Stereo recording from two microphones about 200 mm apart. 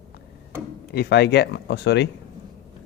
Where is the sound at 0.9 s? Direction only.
55° left (ahead or behind).